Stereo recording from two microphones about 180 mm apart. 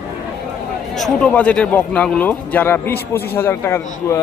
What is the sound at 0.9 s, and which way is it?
Speech, 5° left (ahead or behind).